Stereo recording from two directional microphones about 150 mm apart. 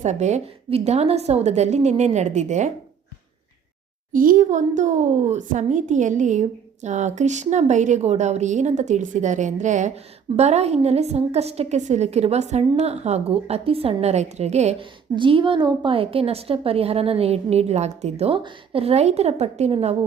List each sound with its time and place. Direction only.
0.0 s a child's voice: 50° right (ahead or behind)
4.1 s a child's voice: 65° right (ahead or behind); by 14.8 s 45° right (ahead or behind)
15.1 s a woman's voice: 35° right (ahead or behind)